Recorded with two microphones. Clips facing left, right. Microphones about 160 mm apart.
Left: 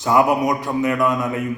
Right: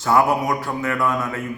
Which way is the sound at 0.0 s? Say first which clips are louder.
Left 2 dB; 15° left (ahead or behind).